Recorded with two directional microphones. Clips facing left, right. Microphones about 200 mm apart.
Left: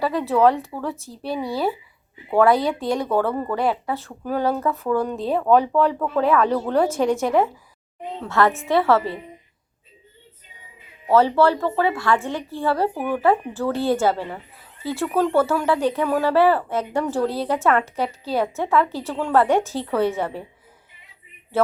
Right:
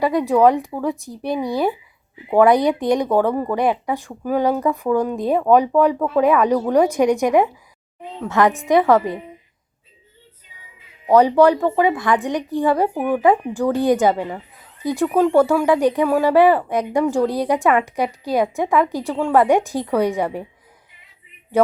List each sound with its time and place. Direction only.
0.0 s speech: 15° right (ahead or behind)
11.1 s speech: 15° right (ahead or behind)
21.5 s a sound: 15° right (ahead or behind)